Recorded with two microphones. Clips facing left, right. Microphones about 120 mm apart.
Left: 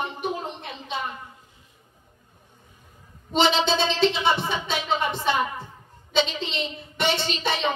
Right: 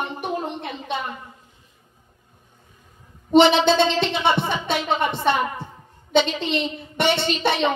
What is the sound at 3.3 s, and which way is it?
A woman's voice, 60° right (ahead or behind).